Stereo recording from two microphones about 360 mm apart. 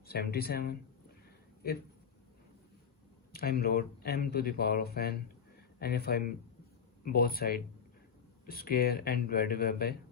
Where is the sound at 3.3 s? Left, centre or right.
Left.